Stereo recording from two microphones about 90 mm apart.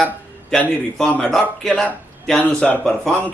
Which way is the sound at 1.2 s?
5° left (ahead or behind).